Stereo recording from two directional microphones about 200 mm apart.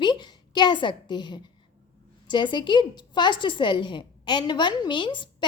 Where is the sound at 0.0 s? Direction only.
20° left (ahead or behind).